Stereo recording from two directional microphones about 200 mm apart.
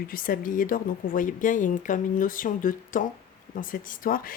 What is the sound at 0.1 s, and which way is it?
A woman's voice, 45° left (ahead or behind).